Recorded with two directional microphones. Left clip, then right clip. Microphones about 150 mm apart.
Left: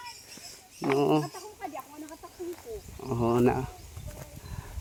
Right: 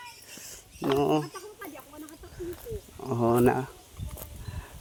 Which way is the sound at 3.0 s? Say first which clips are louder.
Right 2 dB; 5° right (ahead or behind).